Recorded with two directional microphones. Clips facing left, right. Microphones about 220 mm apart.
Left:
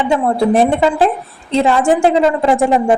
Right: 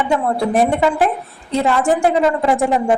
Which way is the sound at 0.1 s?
25° left (ahead or behind).